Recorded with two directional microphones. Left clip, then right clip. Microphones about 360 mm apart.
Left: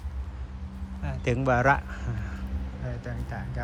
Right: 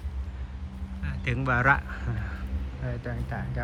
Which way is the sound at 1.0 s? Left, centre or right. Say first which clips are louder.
Left 3 dB; centre.